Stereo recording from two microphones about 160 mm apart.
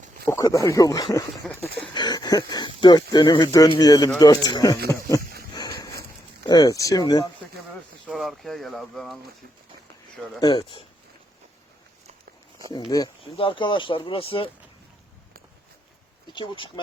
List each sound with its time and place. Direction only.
0.3 s speech: 20° left (ahead or behind)
5.5 s a sound: 25° left (ahead or behind)
6.4 s speech: 25° left (ahead or behind)
8.0 s speech: centre (ahead or behind)
10.4 s speech: 30° left (ahead or behind)
12.7 s speech: 25° left (ahead or behind)
16.3 s speech: 30° left (ahead or behind)